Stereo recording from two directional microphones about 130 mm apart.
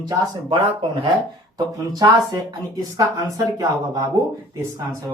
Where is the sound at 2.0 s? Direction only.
25° right (ahead or behind).